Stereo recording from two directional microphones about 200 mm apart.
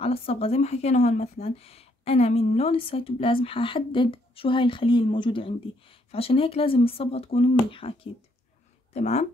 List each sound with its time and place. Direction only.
0.0 s speech: 30° left (ahead or behind)